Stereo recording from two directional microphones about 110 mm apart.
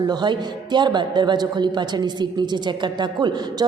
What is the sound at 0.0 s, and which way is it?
A man's voice, 40° right (ahead or behind).